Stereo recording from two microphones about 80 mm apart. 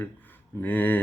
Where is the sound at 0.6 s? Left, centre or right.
Left.